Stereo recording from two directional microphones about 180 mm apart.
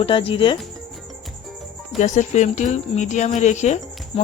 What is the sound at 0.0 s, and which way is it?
Speech, 30° left (ahead or behind).